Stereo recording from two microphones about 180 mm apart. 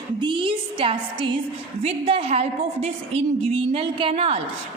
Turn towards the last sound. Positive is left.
turn(degrees=-30)  # may be behind; listen again after turning